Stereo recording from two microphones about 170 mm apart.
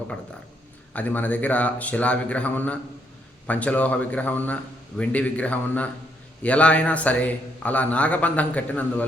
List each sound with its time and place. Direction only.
0.9 s a man's voice: 10° left (ahead or behind)